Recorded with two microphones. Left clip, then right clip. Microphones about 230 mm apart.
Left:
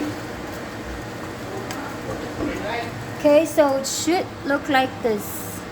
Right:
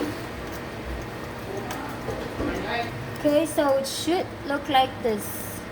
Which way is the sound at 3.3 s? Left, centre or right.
Left.